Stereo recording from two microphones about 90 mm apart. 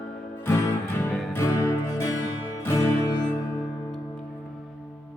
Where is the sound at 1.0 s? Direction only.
25° left (ahead or behind).